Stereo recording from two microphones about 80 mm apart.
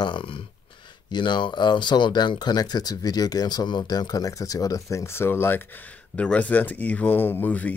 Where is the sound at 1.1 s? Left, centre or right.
Left.